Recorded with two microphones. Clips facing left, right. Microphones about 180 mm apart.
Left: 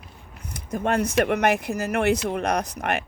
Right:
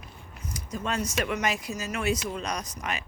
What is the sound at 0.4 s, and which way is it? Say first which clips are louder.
Speech: left 7 dB; 60° left (ahead or behind).